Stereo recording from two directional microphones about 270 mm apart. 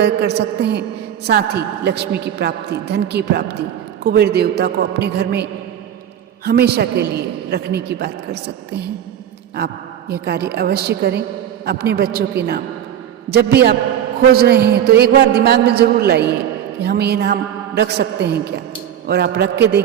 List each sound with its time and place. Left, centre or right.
0.0 s a man's voice: right
10.1 s a man's voice: right